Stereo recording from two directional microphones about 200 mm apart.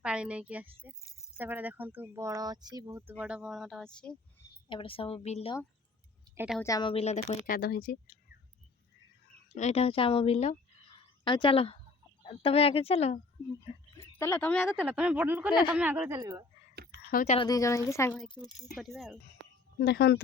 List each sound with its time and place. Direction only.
0.0 s a woman's voice: 5° right (ahead or behind)
4.7 s speech: 25° left (ahead or behind)
6.3 s a woman's voice: 10° right (ahead or behind)
6.6 s speech: 20° left (ahead or behind); by 8.1 s 50° left (ahead or behind)
9.6 s speech: 35° left (ahead or behind)
13.9 s speech: 15° left (ahead or behind)
14.8 s speech: 5° right (ahead or behind)
17.1 s speech: 45° left (ahead or behind)
17.3 s a woman's voice: 20° left (ahead or behind)
18.8 s speech: centre (ahead or behind)
19.8 s a woman's voice: 50° left (ahead or behind)